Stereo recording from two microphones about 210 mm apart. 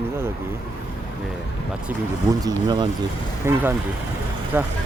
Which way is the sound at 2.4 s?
20° right (ahead or behind).